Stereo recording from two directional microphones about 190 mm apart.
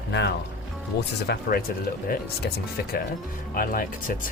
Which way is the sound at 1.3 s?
50° left (ahead or behind).